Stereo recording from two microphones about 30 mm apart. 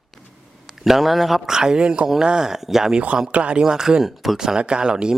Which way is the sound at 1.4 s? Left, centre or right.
Right.